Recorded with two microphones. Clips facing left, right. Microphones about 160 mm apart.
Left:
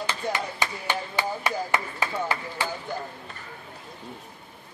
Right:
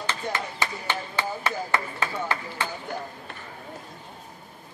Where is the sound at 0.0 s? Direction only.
15° left (ahead or behind).